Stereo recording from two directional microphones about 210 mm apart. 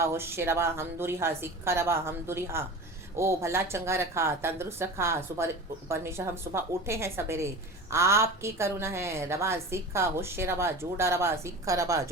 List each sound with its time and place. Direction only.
0.0 s a woman's voice: 10° right (ahead or behind)